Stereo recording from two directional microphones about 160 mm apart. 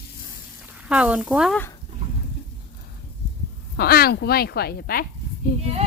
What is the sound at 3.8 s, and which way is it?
Speech, 75° left (ahead or behind).